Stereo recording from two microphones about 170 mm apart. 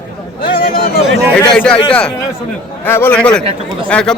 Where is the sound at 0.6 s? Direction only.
60° left (ahead or behind).